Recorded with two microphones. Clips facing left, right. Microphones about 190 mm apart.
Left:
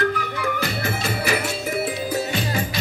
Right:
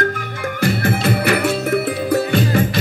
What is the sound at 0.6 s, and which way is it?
Music, 55° right (ahead or behind).